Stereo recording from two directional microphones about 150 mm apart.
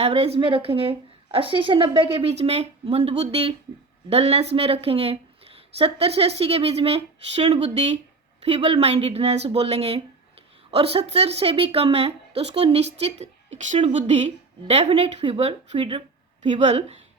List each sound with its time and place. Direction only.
0.0 s a woman's voice: 45° right (ahead or behind)
16.4 s speech: 50° right (ahead or behind)